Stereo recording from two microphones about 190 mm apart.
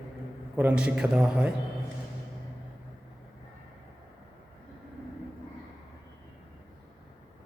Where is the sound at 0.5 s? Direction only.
10° right (ahead or behind).